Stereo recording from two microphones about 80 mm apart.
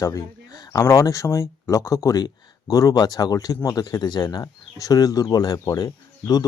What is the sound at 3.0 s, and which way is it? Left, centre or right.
Speech, left.